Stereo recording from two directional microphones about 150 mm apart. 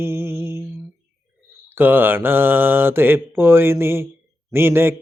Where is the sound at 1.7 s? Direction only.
15° right (ahead or behind).